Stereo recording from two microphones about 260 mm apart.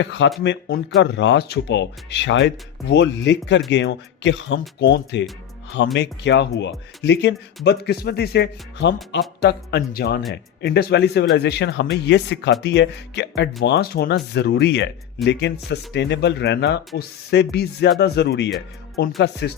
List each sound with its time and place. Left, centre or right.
0.0 s speech: left